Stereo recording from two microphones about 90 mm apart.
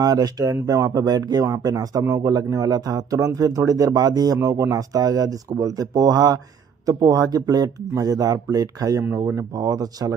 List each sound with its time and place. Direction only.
0.0 s speech: 45° right (ahead or behind)
9.1 s speech: 30° right (ahead or behind)
9.5 s speech: 45° right (ahead or behind)